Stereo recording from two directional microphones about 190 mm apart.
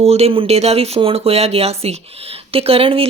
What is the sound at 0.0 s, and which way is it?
Speech, 30° right (ahead or behind).